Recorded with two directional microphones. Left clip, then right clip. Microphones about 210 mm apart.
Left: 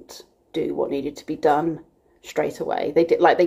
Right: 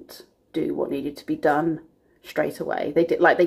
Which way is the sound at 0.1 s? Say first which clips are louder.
Left 1 dB; centre (ahead or behind).